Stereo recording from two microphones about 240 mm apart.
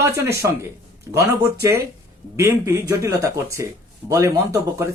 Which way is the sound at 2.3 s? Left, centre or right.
Centre.